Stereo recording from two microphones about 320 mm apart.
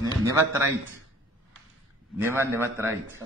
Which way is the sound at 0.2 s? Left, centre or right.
Centre.